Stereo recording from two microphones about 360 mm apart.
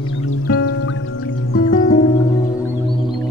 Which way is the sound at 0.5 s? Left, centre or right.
Left.